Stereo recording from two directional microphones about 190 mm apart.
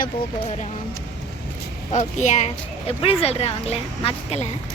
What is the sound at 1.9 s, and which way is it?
Speech, 40° left (ahead or behind).